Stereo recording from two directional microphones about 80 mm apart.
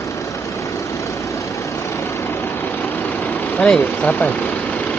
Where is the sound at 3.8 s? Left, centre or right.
Left.